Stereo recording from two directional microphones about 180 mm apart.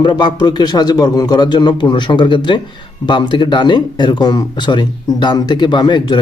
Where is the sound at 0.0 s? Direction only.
25° left (ahead or behind).